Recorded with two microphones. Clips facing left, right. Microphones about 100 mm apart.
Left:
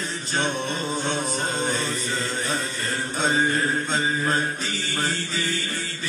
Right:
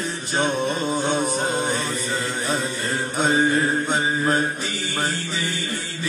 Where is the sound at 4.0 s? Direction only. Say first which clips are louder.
Right 3 dB; 5° right (ahead or behind).